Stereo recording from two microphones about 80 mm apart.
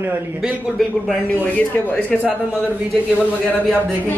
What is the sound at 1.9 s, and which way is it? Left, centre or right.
Speech, centre.